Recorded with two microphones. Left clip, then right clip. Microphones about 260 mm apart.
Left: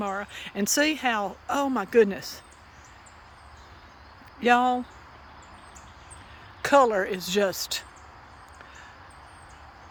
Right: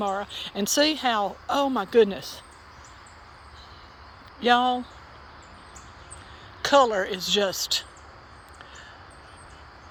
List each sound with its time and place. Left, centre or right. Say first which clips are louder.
0.0 s speech: right 3 dB; centre
4.4 s a woman's voice: even; centre
6.6 s a woman's voice: even; left